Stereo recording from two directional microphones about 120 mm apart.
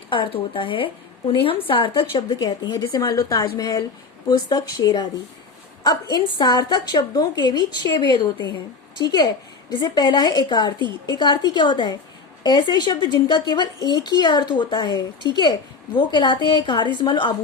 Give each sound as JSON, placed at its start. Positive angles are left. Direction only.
{"t": 0.1, "sound": "speech", "side_deg": 45}